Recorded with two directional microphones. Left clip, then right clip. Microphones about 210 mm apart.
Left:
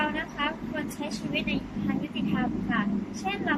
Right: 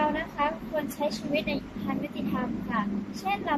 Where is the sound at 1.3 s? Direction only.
25° right (ahead or behind).